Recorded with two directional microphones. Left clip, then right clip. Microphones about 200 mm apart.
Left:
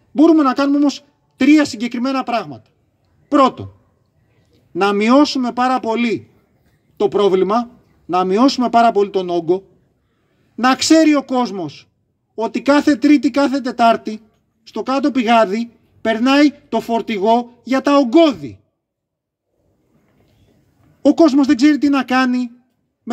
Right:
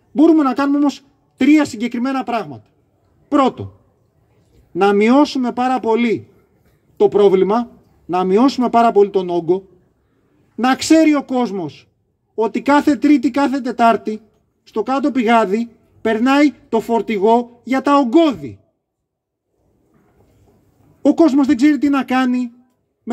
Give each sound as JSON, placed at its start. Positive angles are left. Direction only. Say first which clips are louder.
{"t": 0.1, "sound": "speech", "louder": "left 1 dB", "side_deg": 15}
{"t": 4.7, "sound": "speech", "louder": "right 1 dB", "side_deg": 15}
{"t": 21.0, "sound": "speech", "louder": "left 1 dB", "side_deg": 15}